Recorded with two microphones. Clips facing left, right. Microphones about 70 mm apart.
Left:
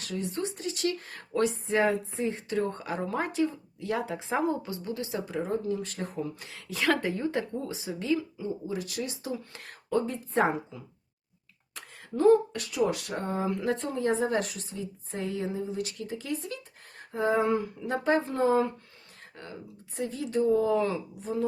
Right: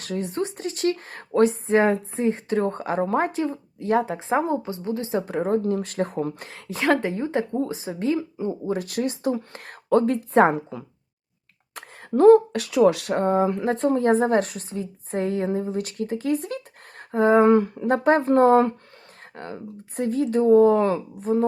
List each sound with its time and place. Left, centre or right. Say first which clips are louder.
0.0 s speech: right 6 dB; right
5.2 s a woman's voice: right 7 dB; right
6.7 s speech: right 5 dB; right
13.1 s a woman's voice: right 10 dB; right